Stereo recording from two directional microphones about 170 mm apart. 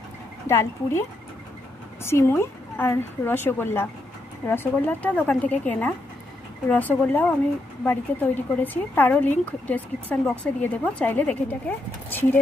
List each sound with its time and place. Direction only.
0.5 s speech: 15° left (ahead or behind)
2.0 s speech: 15° left (ahead or behind)